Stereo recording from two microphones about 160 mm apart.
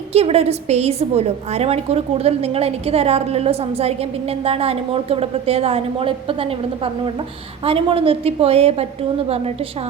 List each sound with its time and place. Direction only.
0.1 s a woman's voice: 40° right (ahead or behind)